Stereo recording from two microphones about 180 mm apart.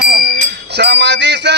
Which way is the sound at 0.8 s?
70° right (ahead or behind).